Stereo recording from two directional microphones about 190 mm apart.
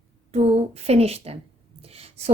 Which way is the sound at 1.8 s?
30° right (ahead or behind).